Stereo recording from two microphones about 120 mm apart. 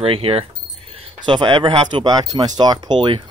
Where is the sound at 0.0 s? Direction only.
55° right (ahead or behind).